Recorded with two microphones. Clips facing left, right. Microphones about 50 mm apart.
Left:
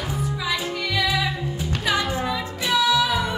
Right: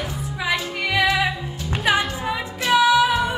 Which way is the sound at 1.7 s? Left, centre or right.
Right.